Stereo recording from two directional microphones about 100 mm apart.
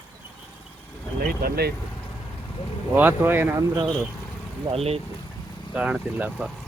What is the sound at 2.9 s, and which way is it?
Speech, 20° right (ahead or behind).